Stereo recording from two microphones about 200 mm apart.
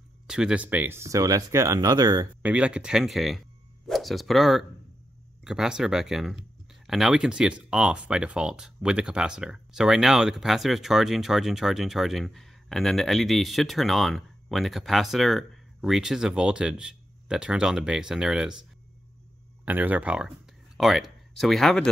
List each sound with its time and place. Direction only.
0.3 s speech: 5° right (ahead or behind)
19.6 s speech: 10° right (ahead or behind)